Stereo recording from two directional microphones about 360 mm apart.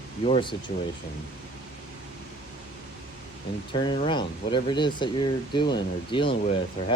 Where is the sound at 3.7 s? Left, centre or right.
Centre.